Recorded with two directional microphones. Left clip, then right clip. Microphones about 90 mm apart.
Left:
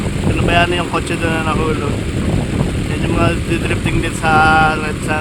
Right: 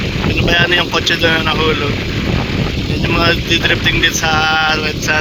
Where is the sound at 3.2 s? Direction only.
10° right (ahead or behind).